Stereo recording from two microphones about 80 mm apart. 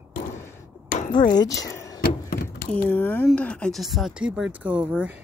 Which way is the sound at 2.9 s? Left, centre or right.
Left.